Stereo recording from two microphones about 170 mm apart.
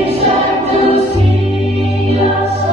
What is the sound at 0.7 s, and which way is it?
Music, 35° right (ahead or behind).